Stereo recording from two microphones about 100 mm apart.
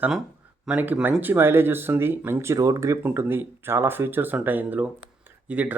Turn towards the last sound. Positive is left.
turn(degrees=-15)  # may be behind; listen again after turning